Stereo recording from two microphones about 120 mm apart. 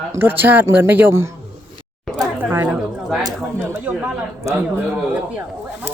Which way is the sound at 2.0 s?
Centre (ahead or behind).